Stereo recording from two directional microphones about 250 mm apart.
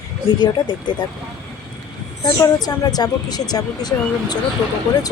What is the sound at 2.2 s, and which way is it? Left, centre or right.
A woman's voice, centre.